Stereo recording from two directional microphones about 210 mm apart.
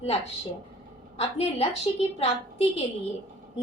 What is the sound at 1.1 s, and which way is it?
A woman's voice, 30° left (ahead or behind).